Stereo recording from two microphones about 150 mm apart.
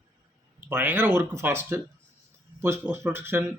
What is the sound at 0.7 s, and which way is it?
Speech, 15° right (ahead or behind).